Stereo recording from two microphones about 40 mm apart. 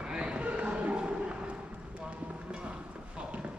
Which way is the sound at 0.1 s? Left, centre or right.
Right.